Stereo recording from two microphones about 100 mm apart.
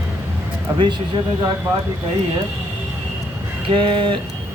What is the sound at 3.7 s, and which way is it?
Speech, 55° right (ahead or behind).